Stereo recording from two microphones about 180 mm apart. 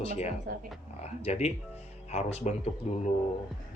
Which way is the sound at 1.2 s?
35° left (ahead or behind).